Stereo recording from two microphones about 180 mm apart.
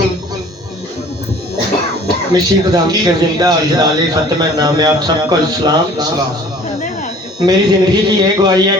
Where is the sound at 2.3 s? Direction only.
20° right (ahead or behind).